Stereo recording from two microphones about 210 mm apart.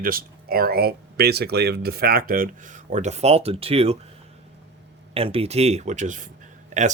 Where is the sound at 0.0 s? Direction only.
45° right (ahead or behind); by 3.9 s 30° right (ahead or behind).